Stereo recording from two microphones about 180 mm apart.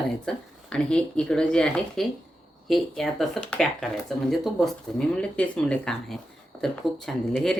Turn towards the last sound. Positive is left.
turn(degrees=5)  # may be behind; listen again after turning